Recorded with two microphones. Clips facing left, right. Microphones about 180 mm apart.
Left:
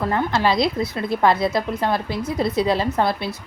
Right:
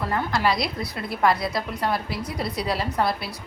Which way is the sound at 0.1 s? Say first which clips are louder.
Left 2 dB; 25° left (ahead or behind).